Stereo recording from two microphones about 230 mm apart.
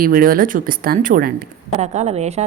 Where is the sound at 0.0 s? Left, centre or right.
Right.